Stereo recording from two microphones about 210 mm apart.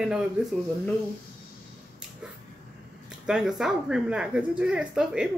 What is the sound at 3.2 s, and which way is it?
Speech, centre (ahead or behind).